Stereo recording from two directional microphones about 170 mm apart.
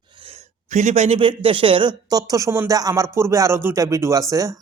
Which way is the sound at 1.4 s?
30° right (ahead or behind).